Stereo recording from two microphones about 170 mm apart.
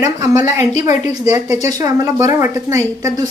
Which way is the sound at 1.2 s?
20° right (ahead or behind).